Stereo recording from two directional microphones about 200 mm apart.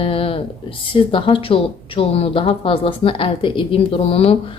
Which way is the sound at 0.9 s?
25° left (ahead or behind).